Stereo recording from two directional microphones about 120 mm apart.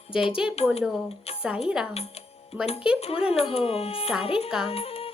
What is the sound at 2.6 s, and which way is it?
Speech, 60° left (ahead or behind).